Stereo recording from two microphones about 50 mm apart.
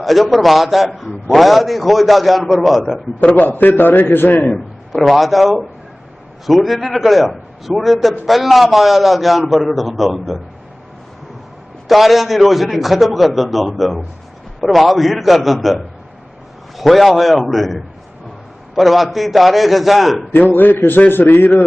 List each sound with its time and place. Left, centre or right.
0.0 s a man's voice: centre
3.2 s a man's voice: left
4.9 s a man's voice: centre
11.9 s a man's voice: centre
20.3 s a man's voice: left